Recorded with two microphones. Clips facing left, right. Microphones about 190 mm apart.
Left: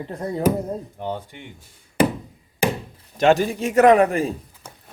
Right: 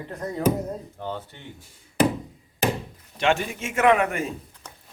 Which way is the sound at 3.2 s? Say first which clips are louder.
Left 7 dB; 40° left (ahead or behind).